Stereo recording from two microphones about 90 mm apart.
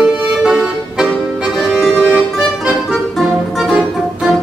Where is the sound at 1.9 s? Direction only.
15° right (ahead or behind).